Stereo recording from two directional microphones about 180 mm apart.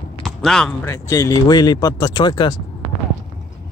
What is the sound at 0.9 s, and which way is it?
Speech, 15° left (ahead or behind).